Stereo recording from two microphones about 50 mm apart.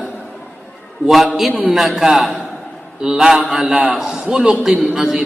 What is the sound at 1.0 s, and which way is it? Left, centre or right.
A man's voice, centre.